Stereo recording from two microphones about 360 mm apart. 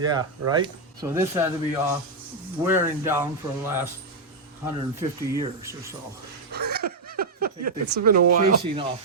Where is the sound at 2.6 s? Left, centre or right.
Centre.